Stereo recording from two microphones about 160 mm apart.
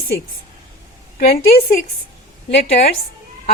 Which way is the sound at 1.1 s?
70° left (ahead or behind).